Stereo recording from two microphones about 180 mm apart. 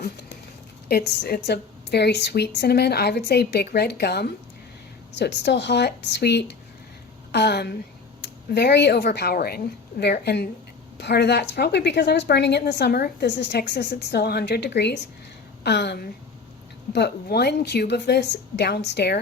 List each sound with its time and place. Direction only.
0.9 s a woman's voice: 60° left (ahead or behind)